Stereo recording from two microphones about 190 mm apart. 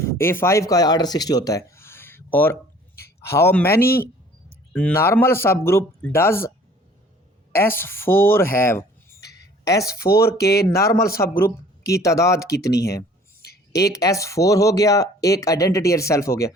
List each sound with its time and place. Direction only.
0.1 s speech: 15° left (ahead or behind)
7.5 s speech: 15° left (ahead or behind)
10.2 s speech: 55° left (ahead or behind)
11.0 s speech: 15° left (ahead or behind)